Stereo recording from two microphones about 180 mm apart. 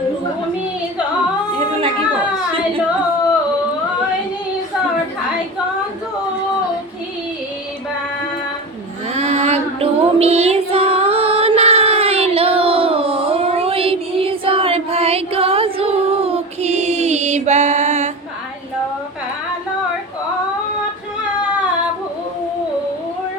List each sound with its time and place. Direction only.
9.1 s child singing: 35° right (ahead or behind)